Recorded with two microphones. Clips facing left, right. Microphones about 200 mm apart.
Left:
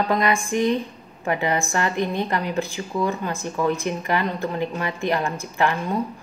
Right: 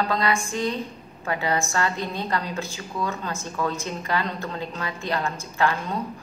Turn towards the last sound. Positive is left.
turn(degrees=15)  # may be behind; listen again after turning